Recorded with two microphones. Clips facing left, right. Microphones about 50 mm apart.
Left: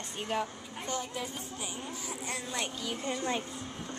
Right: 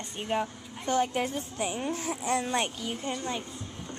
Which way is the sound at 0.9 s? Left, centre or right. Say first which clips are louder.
Right 10 dB; right.